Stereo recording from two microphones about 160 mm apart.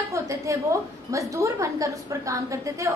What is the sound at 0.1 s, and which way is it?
A woman's voice, 20° right (ahead or behind).